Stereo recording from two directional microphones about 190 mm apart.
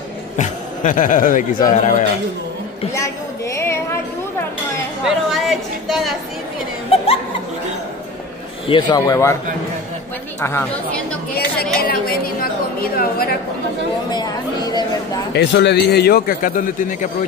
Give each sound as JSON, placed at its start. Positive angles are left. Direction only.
{"t": 0.4, "sound": "a man's voice", "side_deg": 45}
{"t": 2.9, "sound": "a sound", "side_deg": 15}
{"t": 5.0, "sound": "chatter", "side_deg": 0}
{"t": 8.6, "sound": "speech", "side_deg": 25}
{"t": 10.4, "sound": "a woman's voice", "side_deg": 10}
{"t": 11.8, "sound": "a man's voice", "side_deg": 50}
{"t": 14.1, "sound": "speech", "side_deg": 20}
{"t": 15.3, "sound": "a man's voice", "side_deg": 65}